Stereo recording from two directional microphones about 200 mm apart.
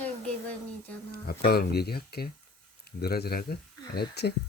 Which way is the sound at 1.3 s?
50° left (ahead or behind).